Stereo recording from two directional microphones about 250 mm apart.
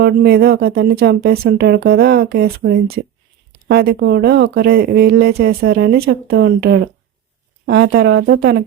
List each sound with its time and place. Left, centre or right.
0.0 s speech: right